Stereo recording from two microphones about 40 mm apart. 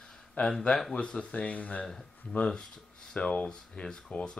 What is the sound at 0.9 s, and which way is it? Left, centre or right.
Speech, left.